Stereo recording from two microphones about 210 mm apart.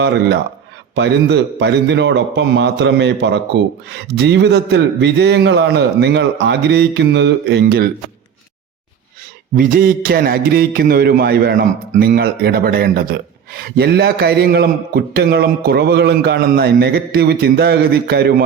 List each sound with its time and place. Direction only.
0.0 s a man's voice: 55° right (ahead or behind)
9.6 s speech: 40° right (ahead or behind)